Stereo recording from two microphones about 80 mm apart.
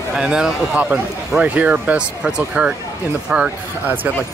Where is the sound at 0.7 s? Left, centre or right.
Right.